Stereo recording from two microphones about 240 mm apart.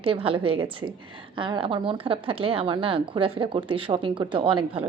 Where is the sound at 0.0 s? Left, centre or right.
Right.